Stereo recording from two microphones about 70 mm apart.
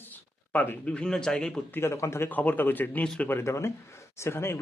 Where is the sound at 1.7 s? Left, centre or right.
Left.